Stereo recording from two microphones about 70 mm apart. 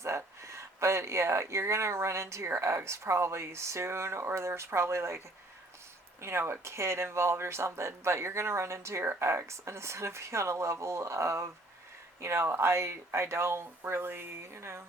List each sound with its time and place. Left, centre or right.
0.0 s speech: right
6.2 s speech: right